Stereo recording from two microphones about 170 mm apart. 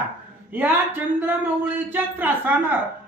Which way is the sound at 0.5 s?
10° right (ahead or behind).